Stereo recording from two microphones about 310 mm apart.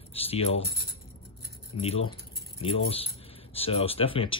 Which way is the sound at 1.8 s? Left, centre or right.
Centre.